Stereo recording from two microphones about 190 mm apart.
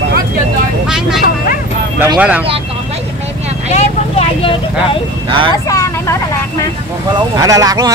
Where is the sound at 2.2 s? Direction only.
10° right (ahead or behind).